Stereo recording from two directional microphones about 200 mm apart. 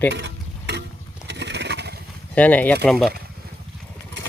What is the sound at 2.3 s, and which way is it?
Speech, 10° left (ahead or behind).